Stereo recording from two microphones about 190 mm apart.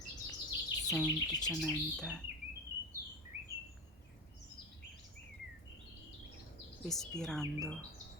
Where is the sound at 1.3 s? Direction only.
20° left (ahead or behind).